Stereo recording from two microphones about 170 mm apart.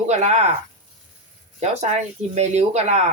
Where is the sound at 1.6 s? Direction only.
40° right (ahead or behind).